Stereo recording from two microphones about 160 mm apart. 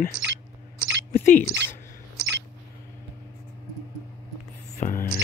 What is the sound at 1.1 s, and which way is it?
Speech, 50° left (ahead or behind).